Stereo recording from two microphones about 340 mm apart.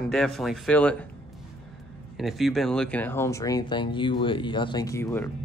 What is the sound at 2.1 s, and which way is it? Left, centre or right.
Speech, centre.